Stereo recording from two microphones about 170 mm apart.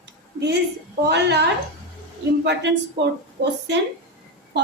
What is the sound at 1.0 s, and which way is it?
Speech, 80° right.